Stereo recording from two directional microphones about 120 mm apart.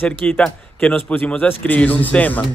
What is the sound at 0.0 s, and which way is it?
A man's voice, 15° left (ahead or behind).